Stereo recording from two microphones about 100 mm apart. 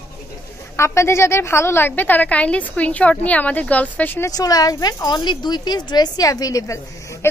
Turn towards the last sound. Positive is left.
turn(degrees=30)  # may be behind; listen again after turning